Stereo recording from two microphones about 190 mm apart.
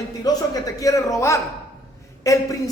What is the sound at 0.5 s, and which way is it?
Speech, 15° left (ahead or behind).